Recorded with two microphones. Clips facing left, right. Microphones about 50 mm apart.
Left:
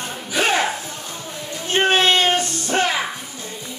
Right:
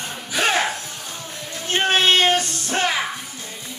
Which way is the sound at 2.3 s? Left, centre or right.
Centre.